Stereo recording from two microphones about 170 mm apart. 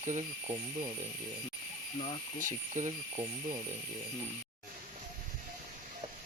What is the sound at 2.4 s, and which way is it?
Speech, 50° right (ahead or behind).